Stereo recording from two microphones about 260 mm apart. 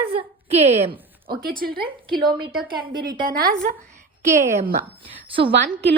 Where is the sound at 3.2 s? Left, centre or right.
Right.